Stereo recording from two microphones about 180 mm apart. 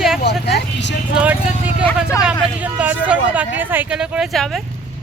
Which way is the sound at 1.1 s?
10° right (ahead or behind).